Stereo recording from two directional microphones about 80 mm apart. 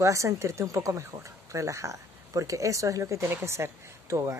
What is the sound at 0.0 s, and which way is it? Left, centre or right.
Speech, right.